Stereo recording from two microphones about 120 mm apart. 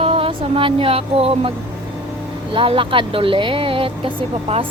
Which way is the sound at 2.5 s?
50° right (ahead or behind).